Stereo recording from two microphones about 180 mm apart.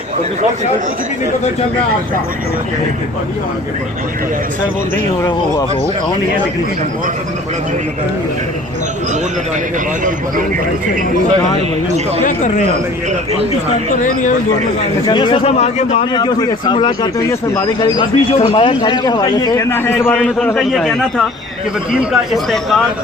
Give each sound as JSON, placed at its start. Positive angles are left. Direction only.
{"t": 12.2, "sound": "speech", "side_deg": 40}
{"t": 14.0, "sound": "speech", "side_deg": 45}
{"t": 15.0, "sound": "speech", "side_deg": 25}
{"t": 16.1, "sound": "speech", "side_deg": 25}
{"t": 20.6, "sound": "a man's voice", "side_deg": 0}